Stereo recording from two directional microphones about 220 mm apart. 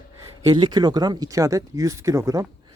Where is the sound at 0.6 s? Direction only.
20° right (ahead or behind).